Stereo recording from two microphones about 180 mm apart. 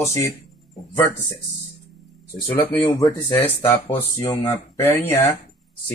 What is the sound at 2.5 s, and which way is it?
Speech, 30° left (ahead or behind).